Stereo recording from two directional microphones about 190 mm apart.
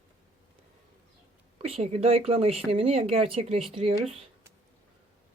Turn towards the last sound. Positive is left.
turn(degrees=-30)  # may be behind; listen again after turning